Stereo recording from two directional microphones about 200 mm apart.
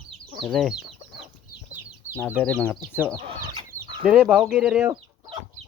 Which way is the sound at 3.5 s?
25° right (ahead or behind).